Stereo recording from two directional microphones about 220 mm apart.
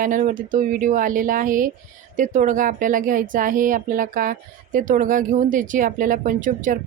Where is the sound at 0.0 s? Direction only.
35° right (ahead or behind).